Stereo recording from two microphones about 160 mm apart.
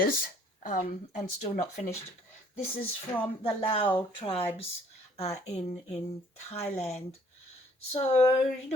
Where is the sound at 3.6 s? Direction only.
35° left (ahead or behind).